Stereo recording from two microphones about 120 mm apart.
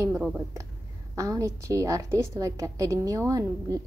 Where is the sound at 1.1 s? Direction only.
25° right (ahead or behind).